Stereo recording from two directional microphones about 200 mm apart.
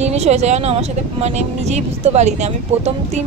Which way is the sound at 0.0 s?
35° right (ahead or behind).